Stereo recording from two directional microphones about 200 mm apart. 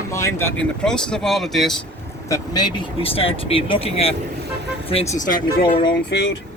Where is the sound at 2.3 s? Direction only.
20° left (ahead or behind); by 5.4 s 40° left (ahead or behind).